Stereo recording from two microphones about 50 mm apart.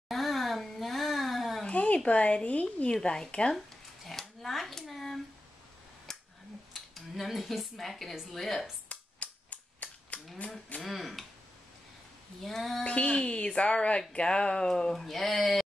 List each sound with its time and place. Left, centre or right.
0.1 s a sound: centre
1.7 s a sound: left
2.0 s speech: left
2.9 s speech: centre
3.5 s speech: centre
6.1 s a sound: centre
6.7 s speech: centre
8.8 s cap gun: left
10.8 s speech: centre
12.4 s speech: centre
12.8 s speech: left; by 15.6 s centre